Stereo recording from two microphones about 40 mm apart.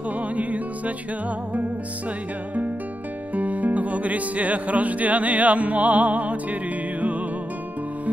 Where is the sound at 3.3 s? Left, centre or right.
Right.